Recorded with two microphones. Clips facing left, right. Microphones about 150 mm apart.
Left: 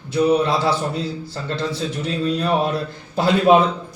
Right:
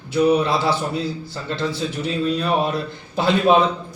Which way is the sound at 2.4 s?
5° right (ahead or behind).